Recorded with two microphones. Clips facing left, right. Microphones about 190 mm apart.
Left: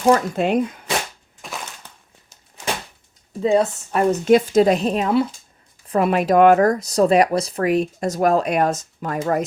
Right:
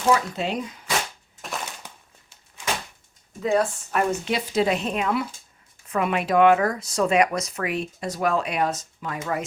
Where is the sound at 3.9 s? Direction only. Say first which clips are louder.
Left 9 dB; 40° left (ahead or behind).